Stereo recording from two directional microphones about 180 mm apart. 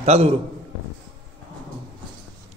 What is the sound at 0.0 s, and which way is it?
Speech, 35° right (ahead or behind).